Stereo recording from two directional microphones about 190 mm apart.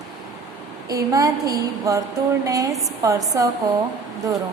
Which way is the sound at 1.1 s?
20° right (ahead or behind).